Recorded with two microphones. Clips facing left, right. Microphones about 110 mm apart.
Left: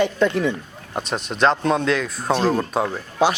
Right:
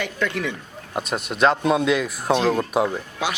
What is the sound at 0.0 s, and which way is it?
Speech, 30° left (ahead or behind).